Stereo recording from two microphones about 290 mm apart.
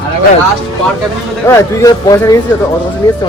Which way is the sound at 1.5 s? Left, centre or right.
Centre.